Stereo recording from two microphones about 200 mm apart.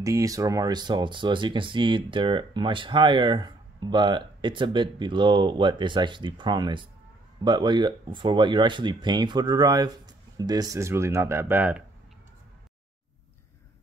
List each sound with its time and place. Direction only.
0.0 s speech: 15° right (ahead or behind)